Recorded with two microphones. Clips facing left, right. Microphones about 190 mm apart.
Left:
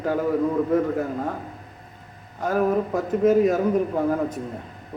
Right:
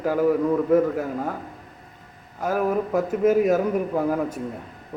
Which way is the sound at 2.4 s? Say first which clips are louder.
Left 1 dB; 5° right (ahead or behind).